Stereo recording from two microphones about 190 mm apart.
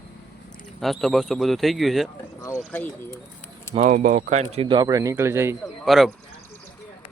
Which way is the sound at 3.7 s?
40° right (ahead or behind).